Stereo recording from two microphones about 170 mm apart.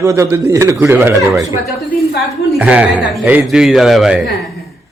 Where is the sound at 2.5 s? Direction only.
5° right (ahead or behind).